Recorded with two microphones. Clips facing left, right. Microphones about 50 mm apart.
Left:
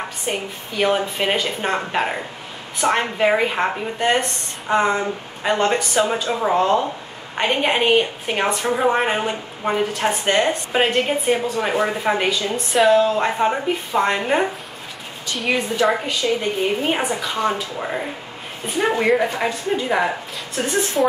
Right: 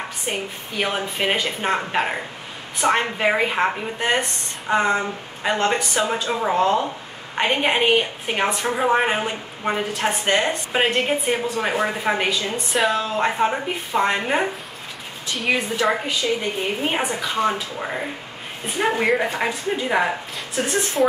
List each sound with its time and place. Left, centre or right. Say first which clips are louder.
0.3 s a woman's voice: left 2 dB; centre